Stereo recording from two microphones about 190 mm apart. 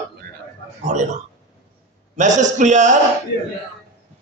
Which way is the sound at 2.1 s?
40° right (ahead or behind).